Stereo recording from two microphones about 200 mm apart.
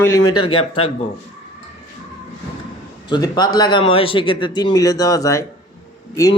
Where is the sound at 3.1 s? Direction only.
20° left (ahead or behind).